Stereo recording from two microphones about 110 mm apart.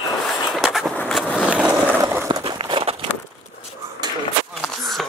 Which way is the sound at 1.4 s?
10° right (ahead or behind).